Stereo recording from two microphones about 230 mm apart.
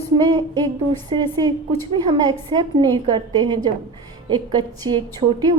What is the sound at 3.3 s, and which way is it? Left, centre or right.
A woman's voice, centre.